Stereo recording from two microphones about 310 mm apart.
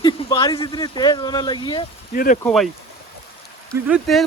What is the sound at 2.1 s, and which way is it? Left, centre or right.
Speech, left.